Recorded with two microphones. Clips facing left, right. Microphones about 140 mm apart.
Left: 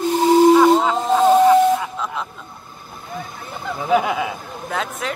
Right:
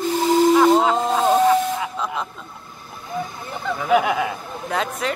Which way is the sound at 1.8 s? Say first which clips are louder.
Even; centre (ahead or behind).